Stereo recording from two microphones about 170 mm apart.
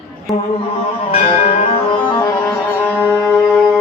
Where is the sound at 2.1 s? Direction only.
20° left (ahead or behind); by 3.6 s 5° left (ahead or behind).